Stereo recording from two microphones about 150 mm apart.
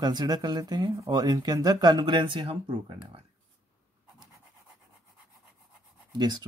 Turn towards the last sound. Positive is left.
turn(degrees=-30)  # may be behind; listen again after turning